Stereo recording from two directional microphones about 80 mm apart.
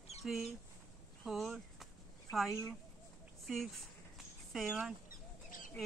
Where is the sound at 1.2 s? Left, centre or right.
Centre.